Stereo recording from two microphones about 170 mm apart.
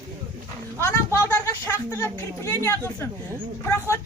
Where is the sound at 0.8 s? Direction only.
15° left (ahead or behind).